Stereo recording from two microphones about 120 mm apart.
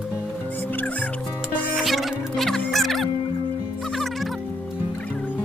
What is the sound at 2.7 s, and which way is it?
Music, centre (ahead or behind).